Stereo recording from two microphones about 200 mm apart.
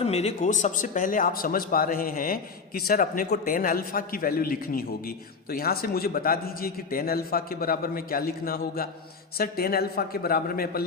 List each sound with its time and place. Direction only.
0.0 s speech: 30° left (ahead or behind); by 10.8 s 50° left (ahead or behind)